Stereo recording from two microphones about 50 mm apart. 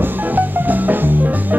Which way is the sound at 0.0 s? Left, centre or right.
Right.